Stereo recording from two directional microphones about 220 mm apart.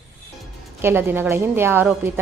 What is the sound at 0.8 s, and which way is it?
A woman's voice, 10° right (ahead or behind).